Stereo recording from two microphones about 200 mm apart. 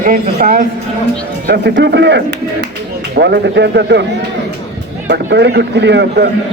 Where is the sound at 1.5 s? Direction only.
55° right (ahead or behind).